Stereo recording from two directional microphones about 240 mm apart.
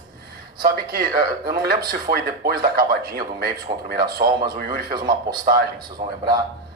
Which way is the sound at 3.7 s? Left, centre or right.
Centre.